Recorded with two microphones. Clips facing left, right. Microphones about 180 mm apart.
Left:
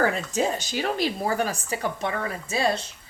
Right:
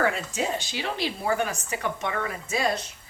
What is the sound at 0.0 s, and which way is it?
A woman's voice, 40° left (ahead or behind).